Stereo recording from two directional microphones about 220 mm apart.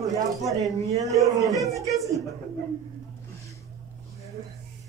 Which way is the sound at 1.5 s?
Centre (ahead or behind).